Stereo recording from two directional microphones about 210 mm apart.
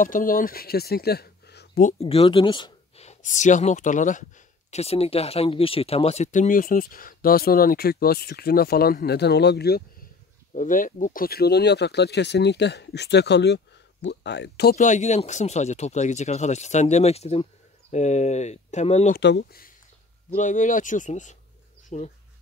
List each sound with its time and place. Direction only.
0.0 s speech: 40° left (ahead or behind)
1.9 s speech: 30° left (ahead or behind); by 9.8 s 50° left (ahead or behind)
10.5 s speech: 40° left (ahead or behind)
14.8 s speech: 35° left (ahead or behind)
19.1 s speech: 50° left (ahead or behind)
20.3 s speech: 35° left (ahead or behind)